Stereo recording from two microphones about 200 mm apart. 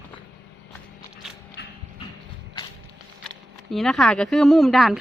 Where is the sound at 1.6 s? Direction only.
55° left (ahead or behind).